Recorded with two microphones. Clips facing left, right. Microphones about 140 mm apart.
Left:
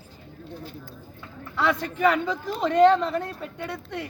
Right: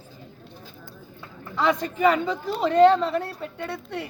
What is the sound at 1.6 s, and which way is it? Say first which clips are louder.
Speech: right 2 dB; 10° right (ahead or behind).